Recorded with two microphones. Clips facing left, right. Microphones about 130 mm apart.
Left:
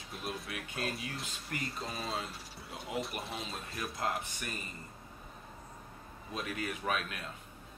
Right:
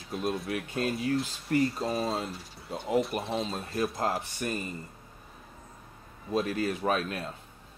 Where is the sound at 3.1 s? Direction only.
30° right (ahead or behind).